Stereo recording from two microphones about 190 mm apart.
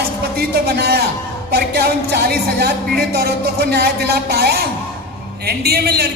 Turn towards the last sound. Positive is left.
turn(degrees=-55)  # may be behind; listen again after turning